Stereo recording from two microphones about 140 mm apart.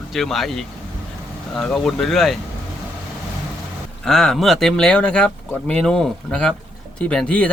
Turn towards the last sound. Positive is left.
turn(degrees=5)  # may be behind; listen again after turning